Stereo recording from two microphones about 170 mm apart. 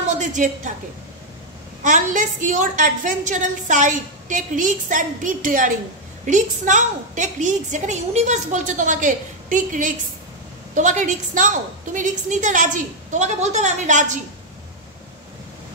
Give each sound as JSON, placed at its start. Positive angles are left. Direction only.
{"t": 0.2, "sound": "a woman's voice", "side_deg": -45}
{"t": 1.8, "sound": "a woman's voice", "side_deg": -50}